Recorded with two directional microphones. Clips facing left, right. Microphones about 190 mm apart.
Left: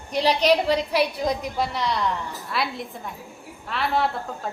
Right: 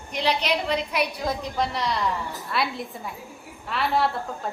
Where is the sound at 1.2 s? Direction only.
15° left (ahead or behind).